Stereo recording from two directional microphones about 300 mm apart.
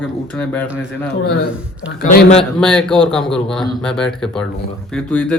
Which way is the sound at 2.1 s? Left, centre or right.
Left.